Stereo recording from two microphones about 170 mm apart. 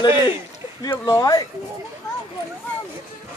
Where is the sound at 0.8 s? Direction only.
20° left (ahead or behind).